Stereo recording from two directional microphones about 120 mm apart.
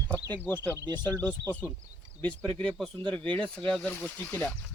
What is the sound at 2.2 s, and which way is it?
Speech, 10° left (ahead or behind).